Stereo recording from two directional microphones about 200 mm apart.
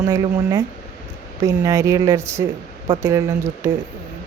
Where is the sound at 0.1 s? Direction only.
20° right (ahead or behind).